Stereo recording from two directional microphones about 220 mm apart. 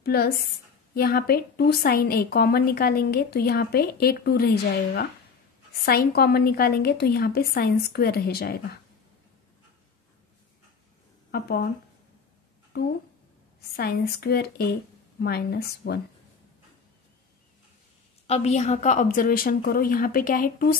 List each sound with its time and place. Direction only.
0.0 s a woman's voice: 45° left (ahead or behind)
5.7 s a woman's voice: 45° left (ahead or behind)
11.3 s a woman's voice: 45° left (ahead or behind)
12.7 s a woman's voice: 45° left (ahead or behind)
18.2 s a woman's voice: 30° left (ahead or behind)